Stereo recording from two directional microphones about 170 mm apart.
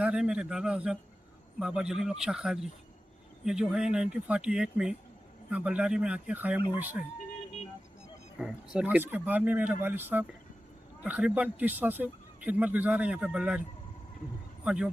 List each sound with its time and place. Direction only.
0.0 s speech: 5° right (ahead or behind)
8.4 s speech: 5° right (ahead or behind)
14.6 s speech: 5° right (ahead or behind)